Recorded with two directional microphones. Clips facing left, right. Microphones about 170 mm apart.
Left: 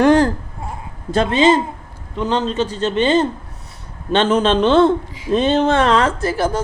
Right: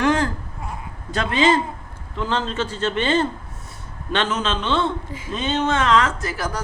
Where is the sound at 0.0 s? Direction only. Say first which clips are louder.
Left 7 dB; 35° left (ahead or behind).